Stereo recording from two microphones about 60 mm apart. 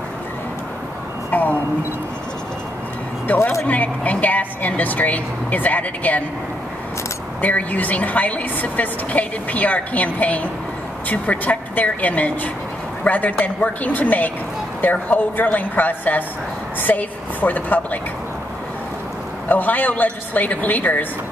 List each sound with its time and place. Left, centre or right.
1.3 s a sound: left
3.3 s a woman's voice: left
7.4 s a woman's voice: left
19.5 s a woman's voice: left